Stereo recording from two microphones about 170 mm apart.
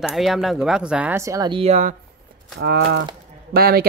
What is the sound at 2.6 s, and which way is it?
Speech, 85° right.